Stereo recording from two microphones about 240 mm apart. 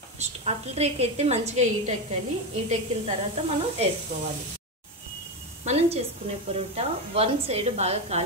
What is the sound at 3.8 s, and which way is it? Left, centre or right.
Speech, right.